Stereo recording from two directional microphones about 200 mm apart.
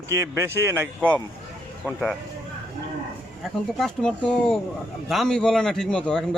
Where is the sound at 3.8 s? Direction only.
5° left (ahead or behind).